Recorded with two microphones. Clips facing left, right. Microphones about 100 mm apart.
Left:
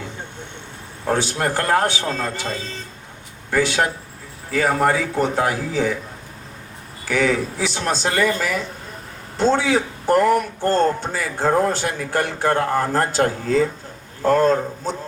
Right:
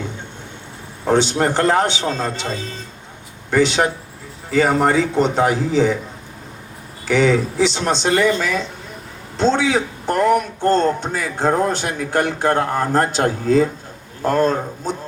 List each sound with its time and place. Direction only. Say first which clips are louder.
1.0 s a man's voice: right 5 dB; 25° right (ahead or behind)
3.5 s a man's voice: right 3 dB; 25° right (ahead or behind)
7.0 s a man's voice: right 4 dB; 25° right (ahead or behind)
9.4 s a man's voice: right 1 dB; 20° right (ahead or behind)